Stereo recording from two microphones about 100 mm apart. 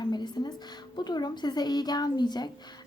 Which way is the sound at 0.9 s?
45° left (ahead or behind).